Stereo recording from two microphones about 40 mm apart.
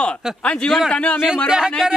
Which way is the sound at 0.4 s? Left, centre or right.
Left.